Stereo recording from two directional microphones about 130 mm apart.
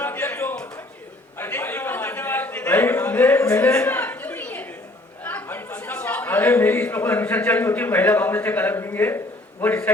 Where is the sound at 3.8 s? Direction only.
15° left (ahead or behind).